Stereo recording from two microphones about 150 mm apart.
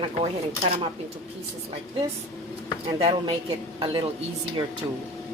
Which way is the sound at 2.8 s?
40° right (ahead or behind).